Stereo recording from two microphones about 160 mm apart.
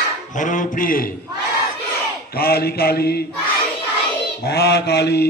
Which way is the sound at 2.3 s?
75° left (ahead or behind).